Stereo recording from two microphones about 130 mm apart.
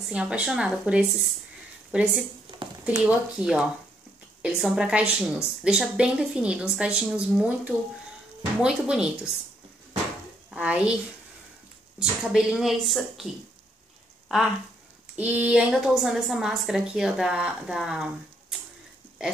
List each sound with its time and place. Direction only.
0.1 s a woman's voice: 10° right (ahead or behind)
10.5 s a woman's voice: 10° right (ahead or behind)
12.0 s a woman's voice: 5° right (ahead or behind)
15.1 s a woman's voice: 10° right (ahead or behind)